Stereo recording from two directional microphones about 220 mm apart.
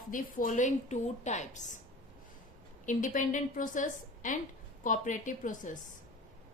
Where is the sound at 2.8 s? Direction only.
35° left (ahead or behind).